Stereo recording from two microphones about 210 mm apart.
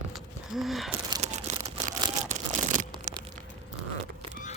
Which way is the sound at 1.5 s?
35° right (ahead or behind).